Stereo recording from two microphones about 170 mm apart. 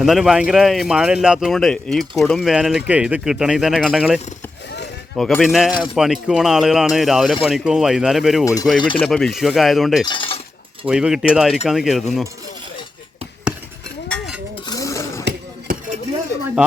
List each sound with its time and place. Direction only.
0.0 s a man's voice: centre (ahead or behind)
10.1 s speech: 30° left (ahead or behind)
10.8 s a man's voice: 5° right (ahead or behind)
14.7 s dishes: 20° left (ahead or behind)
15.2 s music: 65° right (ahead or behind)